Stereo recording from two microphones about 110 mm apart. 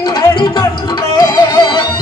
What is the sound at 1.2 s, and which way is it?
Music, 40° left (ahead or behind).